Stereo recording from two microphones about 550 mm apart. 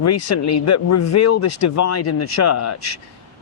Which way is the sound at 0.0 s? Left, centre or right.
Left.